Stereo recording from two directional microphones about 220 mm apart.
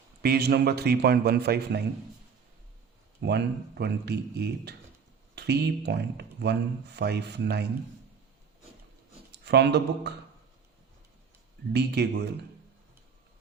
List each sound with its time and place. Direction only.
0.2 s speech: 45° right (ahead or behind)
3.2 s speech: 50° right (ahead or behind)
9.3 s speech: 50° right (ahead or behind)
11.7 s speech: 50° right (ahead or behind)